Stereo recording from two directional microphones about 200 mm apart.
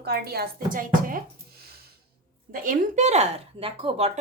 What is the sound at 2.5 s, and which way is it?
Speech, 40° right (ahead or behind).